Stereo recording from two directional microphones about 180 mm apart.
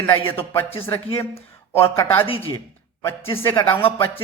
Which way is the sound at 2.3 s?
30° left (ahead or behind).